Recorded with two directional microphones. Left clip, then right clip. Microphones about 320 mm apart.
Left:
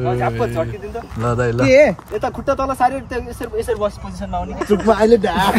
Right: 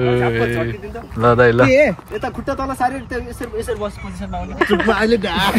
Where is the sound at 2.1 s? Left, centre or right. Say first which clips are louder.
Left 3 dB; left.